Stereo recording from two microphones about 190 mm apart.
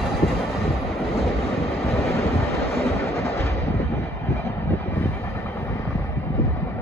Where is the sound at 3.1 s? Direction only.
15° left (ahead or behind).